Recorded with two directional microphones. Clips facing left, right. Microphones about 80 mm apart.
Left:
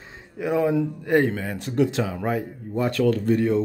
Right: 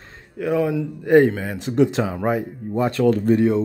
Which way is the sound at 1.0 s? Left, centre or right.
Centre.